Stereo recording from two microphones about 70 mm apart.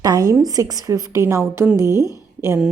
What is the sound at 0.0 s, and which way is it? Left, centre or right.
A woman's voice, right.